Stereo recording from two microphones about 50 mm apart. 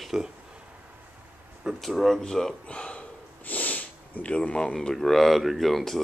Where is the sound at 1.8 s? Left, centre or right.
Centre.